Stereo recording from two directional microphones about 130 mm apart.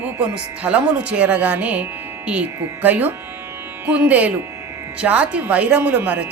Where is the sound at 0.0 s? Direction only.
10° right (ahead or behind).